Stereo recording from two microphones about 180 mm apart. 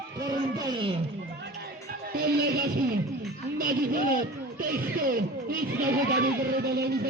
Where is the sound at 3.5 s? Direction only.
55° right (ahead or behind).